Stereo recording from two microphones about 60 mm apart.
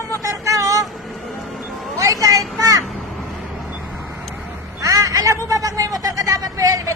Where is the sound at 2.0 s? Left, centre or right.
Right.